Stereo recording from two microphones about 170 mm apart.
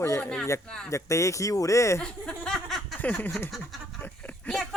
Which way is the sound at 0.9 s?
20° left (ahead or behind).